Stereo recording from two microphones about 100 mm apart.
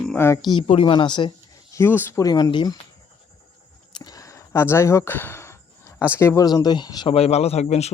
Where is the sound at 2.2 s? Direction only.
45° left (ahead or behind).